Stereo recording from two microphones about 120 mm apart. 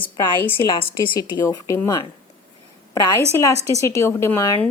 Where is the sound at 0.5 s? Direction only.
45° left (ahead or behind).